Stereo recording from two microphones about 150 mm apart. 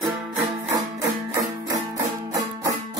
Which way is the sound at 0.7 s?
20° right (ahead or behind).